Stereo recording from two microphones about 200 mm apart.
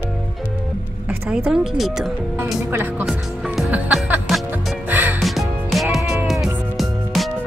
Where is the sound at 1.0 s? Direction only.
10° right (ahead or behind).